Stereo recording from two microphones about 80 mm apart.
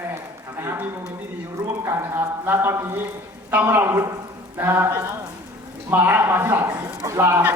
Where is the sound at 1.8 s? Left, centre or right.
Right.